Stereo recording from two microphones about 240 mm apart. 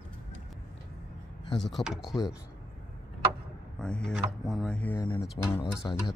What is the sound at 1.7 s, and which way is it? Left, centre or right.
Speech, centre.